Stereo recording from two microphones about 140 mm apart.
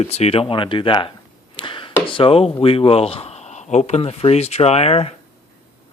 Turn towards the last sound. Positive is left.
turn(degrees=45)  # may be behind; listen again after turning